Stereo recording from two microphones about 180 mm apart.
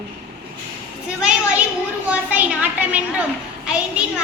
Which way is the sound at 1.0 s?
5° right (ahead or behind).